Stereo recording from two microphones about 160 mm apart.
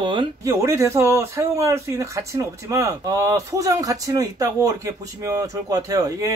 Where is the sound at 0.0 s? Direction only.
30° right (ahead or behind).